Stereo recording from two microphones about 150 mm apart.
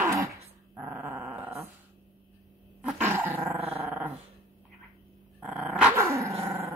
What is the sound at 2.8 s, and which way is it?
Dog, 10° right (ahead or behind).